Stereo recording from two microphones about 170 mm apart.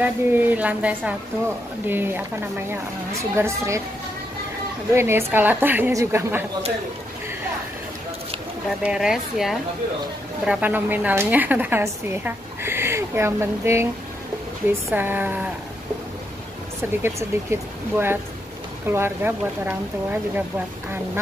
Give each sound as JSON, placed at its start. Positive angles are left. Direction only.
{"t": 0.0, "sound": "speech", "side_deg": -10}
{"t": 4.9, "sound": "speech", "side_deg": -15}
{"t": 8.8, "sound": "speech", "side_deg": -5}
{"t": 15.0, "sound": "speech", "side_deg": -10}
{"t": 17.0, "sound": "speech", "side_deg": -15}